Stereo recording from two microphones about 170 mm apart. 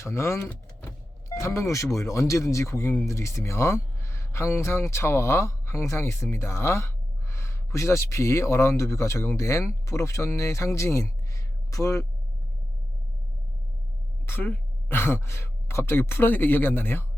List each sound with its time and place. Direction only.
0.0 s speech: 15° left (ahead or behind)
14.3 s a woman's voice: 10° left (ahead or behind)